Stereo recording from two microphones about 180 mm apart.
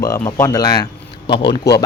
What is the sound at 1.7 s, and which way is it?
Speech, 65° left (ahead or behind).